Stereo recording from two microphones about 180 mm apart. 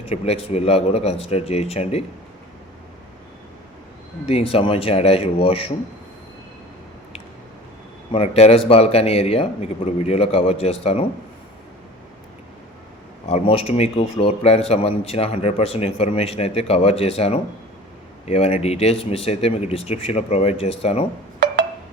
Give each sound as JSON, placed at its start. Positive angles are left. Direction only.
{"t": 0.0, "sound": "a man's voice", "side_deg": 35}
{"t": 4.3, "sound": "a man's voice", "side_deg": 35}
{"t": 8.1, "sound": "a man's voice", "side_deg": 30}
{"t": 13.2, "sound": "a man's voice", "side_deg": 35}